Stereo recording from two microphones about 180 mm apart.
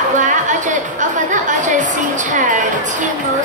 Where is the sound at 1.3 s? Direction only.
45° right (ahead or behind).